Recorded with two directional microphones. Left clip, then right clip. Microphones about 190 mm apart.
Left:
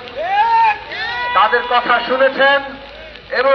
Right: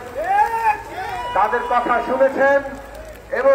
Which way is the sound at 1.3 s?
30° left (ahead or behind).